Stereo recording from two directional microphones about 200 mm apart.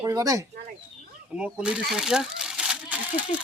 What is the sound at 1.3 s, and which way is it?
Speech, 5° right (ahead or behind).